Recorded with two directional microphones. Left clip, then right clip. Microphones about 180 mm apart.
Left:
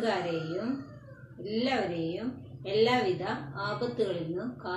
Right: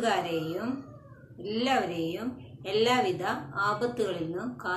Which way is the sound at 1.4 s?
10° right (ahead or behind).